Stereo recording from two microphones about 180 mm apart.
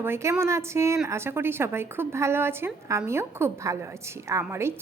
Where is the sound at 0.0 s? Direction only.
15° right (ahead or behind).